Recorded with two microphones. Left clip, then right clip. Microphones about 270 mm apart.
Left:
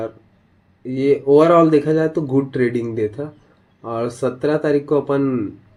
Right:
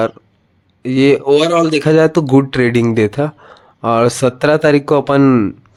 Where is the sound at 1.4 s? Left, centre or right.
Centre.